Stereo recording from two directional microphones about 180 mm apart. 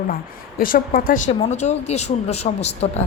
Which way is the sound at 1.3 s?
35° left (ahead or behind).